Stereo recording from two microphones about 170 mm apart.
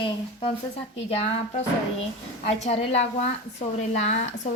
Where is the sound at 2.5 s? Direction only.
40° left (ahead or behind).